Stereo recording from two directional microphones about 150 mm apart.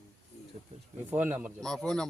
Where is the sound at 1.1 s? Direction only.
10° right (ahead or behind).